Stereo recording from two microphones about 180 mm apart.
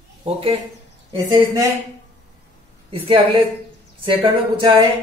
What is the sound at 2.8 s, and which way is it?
Speech, 30° right (ahead or behind).